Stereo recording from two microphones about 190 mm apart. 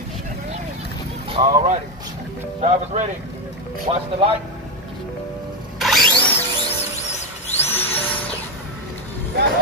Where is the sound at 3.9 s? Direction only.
25° right (ahead or behind).